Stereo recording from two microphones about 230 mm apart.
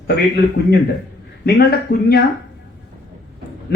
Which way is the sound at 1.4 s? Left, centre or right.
Left.